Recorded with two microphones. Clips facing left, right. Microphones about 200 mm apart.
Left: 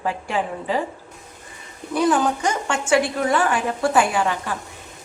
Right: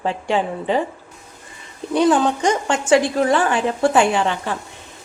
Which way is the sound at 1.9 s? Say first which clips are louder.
Right 3 dB; 25° right (ahead or behind).